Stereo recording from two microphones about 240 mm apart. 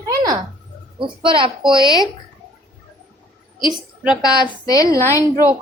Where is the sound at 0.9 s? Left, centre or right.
Right.